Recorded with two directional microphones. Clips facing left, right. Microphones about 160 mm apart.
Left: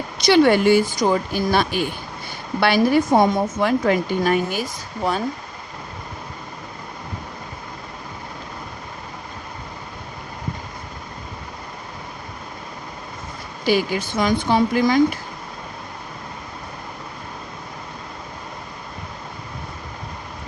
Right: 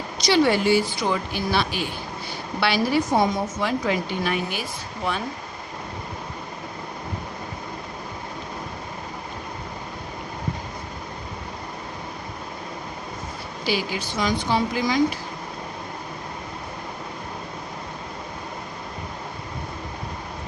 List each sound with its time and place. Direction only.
0.2 s a woman's voice: 60° left (ahead or behind); by 5.2 s 40° left (ahead or behind)
13.7 s a woman's voice: 50° left (ahead or behind)